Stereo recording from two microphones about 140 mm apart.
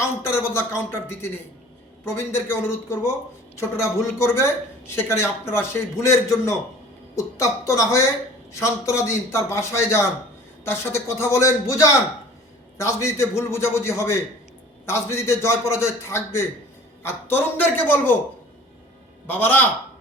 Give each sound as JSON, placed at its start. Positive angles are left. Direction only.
{"t": 0.0, "sound": "a man's voice", "side_deg": 20}
{"t": 19.3, "sound": "a man's voice", "side_deg": 15}